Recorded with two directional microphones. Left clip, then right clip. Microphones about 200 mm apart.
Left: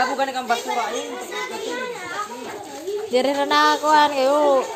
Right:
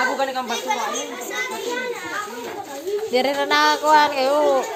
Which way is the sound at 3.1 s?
20° left (ahead or behind).